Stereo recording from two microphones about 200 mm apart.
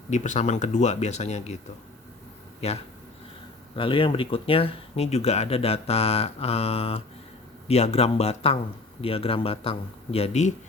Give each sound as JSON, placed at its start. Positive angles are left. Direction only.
{"t": 0.1, "sound": "speech", "side_deg": 35}
{"t": 2.6, "sound": "a man's voice", "side_deg": 30}